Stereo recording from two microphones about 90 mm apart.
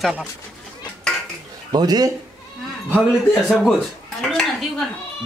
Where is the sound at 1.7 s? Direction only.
50° right (ahead or behind).